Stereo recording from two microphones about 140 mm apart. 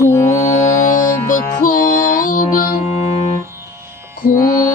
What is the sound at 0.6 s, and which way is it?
Music, 60° left (ahead or behind).